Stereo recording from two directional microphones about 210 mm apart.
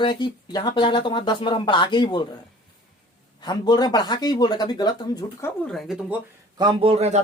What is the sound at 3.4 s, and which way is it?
Speech, 20° left (ahead or behind).